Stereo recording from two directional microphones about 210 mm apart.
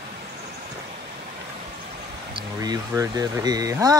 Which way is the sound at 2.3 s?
20° right (ahead or behind).